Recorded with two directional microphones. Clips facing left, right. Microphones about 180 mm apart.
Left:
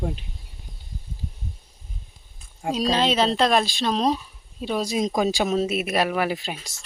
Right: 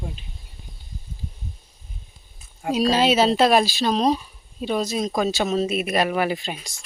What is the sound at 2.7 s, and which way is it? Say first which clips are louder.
Speech: right 3 dB; 5° right (ahead or behind).